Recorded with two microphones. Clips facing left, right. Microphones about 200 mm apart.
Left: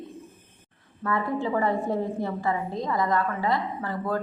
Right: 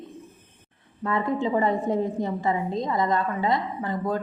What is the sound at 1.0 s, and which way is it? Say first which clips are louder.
A woman's voice: right 2 dB; 20° right (ahead or behind).